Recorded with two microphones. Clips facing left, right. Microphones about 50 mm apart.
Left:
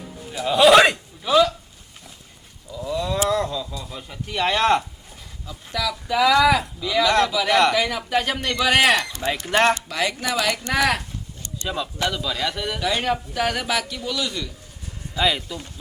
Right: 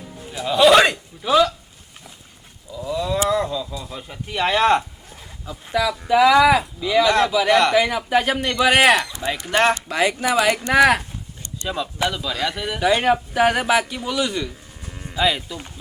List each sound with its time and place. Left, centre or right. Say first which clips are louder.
0.3 s a man's voice: even; centre
2.7 s speech: right 2 dB; centre
5.5 s speech: right 5 dB; centre
9.5 s speech: right 1 dB; centre
9.9 s speech: right 5 dB; right
11.7 s speech: right 2 dB; centre
12.8 s speech: right 7 dB; centre
15.1 s speech: right 1 dB; centre